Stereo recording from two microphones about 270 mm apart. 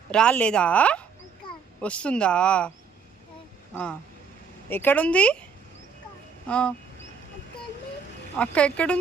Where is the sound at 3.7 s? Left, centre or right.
Centre.